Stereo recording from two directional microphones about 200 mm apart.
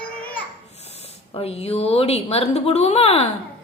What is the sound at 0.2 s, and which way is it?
Babbling, 5° left (ahead or behind).